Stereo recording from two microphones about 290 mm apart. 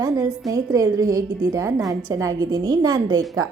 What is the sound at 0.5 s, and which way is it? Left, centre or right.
A woman's voice, centre.